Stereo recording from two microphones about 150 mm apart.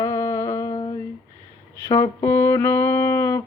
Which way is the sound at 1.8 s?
20° left (ahead or behind).